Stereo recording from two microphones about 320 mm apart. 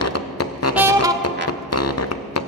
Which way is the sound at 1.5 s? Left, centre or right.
Left.